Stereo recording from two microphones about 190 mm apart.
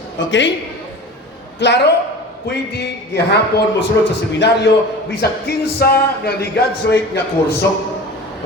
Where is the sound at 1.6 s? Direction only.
65° left (ahead or behind).